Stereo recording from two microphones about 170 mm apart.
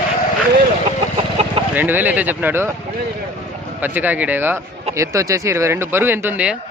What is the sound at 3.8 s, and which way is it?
Speech, 10° right (ahead or behind).